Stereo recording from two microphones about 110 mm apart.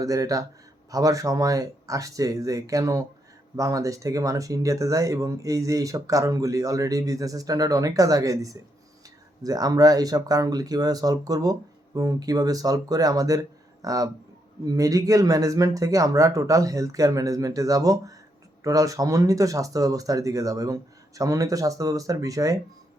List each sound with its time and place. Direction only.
0.0 s speech: 30° right (ahead or behind)